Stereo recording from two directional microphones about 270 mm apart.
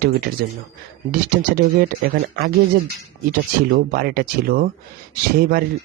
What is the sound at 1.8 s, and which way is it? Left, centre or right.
Speech, right.